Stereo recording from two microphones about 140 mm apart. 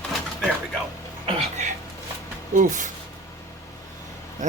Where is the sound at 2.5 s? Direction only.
65° right (ahead or behind).